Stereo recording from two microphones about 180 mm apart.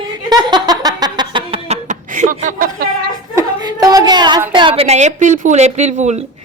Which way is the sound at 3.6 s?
20° right (ahead or behind).